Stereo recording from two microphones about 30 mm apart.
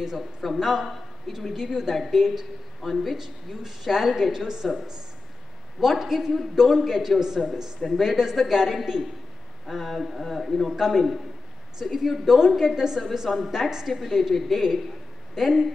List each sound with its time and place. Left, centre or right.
0.4 s a woman's voice: centre
3.2 s a woman's voice: centre
5.8 s a woman's voice: centre
7.2 s speech: centre
7.9 s a woman's voice: centre
10.7 s a woman's voice: centre
13.8 s a woman's voice: centre